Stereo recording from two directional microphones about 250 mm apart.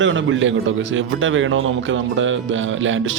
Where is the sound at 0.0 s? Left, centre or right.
Right.